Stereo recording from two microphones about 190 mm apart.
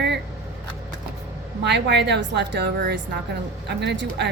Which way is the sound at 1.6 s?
65° right (ahead or behind).